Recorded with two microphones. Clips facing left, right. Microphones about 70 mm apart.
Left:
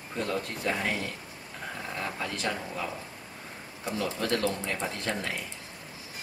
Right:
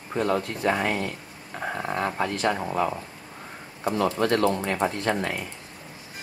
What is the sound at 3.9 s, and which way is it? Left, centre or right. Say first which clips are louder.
Speech: right 7 dB; right.